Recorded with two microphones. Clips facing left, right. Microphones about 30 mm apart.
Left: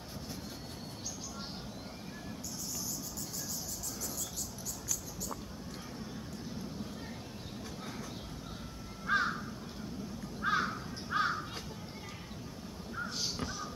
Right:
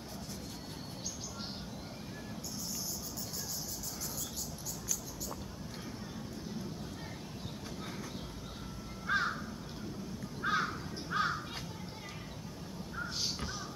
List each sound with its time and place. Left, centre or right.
9.0 s crow: centre
12.9 s crow: centre